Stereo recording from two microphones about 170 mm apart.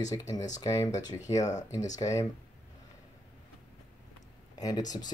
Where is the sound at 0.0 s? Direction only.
20° left (ahead or behind).